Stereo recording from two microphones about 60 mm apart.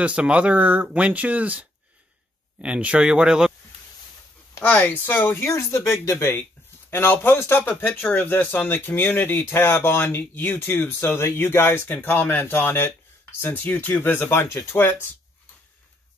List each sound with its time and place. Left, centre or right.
0.0 s speech: centre
4.6 s speech: left